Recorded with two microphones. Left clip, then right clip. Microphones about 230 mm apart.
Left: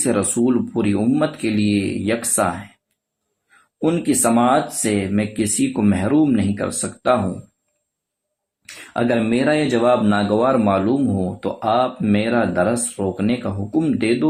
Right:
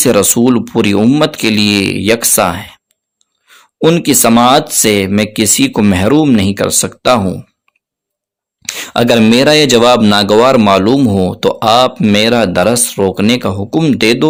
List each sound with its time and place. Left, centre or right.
0.0 s speech: right
3.8 s speech: right
8.6 s speech: right